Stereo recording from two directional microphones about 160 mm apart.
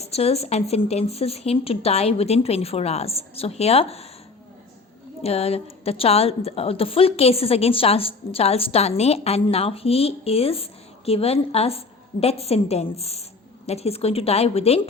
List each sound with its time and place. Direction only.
0.0 s a woman's voice: 40° left (ahead or behind)
5.2 s a woman's voice: 40° left (ahead or behind)